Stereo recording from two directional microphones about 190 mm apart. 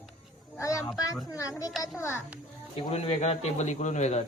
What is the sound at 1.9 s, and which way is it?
Speech, 15° left (ahead or behind).